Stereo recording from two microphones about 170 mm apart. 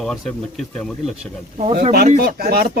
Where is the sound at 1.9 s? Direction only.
65° right (ahead or behind).